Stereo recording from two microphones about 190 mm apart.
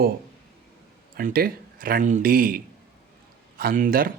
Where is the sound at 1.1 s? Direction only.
50° right (ahead or behind).